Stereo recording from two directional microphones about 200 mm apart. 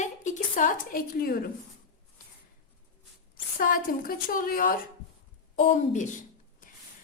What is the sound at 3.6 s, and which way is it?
A woman's voice, 45° left (ahead or behind).